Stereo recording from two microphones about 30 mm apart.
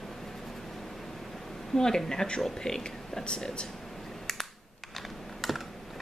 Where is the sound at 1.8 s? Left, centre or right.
Centre.